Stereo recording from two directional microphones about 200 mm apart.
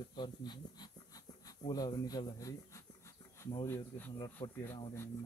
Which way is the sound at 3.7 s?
10° left (ahead or behind).